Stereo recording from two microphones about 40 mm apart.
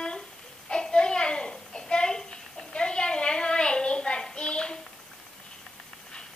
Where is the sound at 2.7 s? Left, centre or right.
Left.